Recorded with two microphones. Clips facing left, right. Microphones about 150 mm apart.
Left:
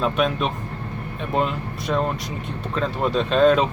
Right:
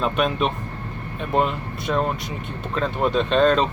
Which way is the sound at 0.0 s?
Centre (ahead or behind).